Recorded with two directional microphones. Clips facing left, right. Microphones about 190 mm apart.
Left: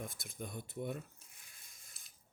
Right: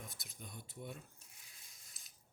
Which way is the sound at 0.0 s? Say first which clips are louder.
Left 8 dB; 50° left (ahead or behind).